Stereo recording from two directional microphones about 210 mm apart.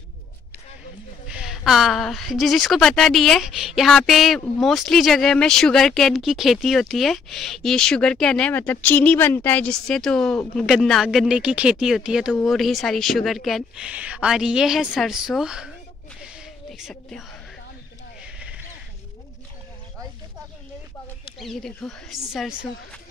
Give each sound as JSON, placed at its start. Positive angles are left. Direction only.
{"t": 1.2, "sound": "speech", "side_deg": -5}
{"t": 16.2, "sound": "a sound", "side_deg": -5}
{"t": 18.2, "sound": "horse", "side_deg": -5}
{"t": 21.4, "sound": "speech", "side_deg": 0}